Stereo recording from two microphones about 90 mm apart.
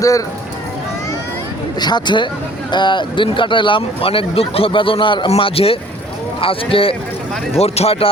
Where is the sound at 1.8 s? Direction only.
55° left (ahead or behind).